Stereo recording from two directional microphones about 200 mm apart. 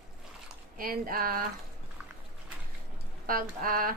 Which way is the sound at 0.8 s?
45° right (ahead or behind).